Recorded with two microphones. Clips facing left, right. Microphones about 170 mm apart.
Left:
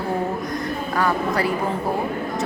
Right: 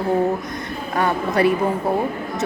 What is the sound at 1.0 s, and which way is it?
Speech, 25° right (ahead or behind).